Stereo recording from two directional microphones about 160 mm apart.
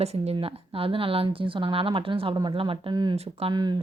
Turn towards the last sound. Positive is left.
turn(degrees=-25)  # may be behind; listen again after turning